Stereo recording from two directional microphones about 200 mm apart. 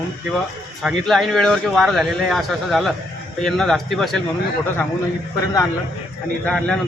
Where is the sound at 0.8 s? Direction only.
Centre (ahead or behind).